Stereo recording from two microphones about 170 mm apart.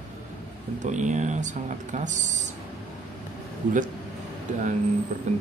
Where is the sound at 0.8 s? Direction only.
45° right (ahead or behind).